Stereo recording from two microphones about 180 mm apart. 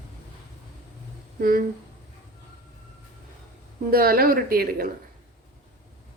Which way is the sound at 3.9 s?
55° right (ahead or behind).